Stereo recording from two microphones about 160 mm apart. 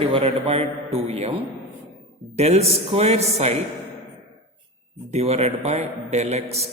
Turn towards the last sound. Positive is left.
turn(degrees=-40)  # may be behind; listen again after turning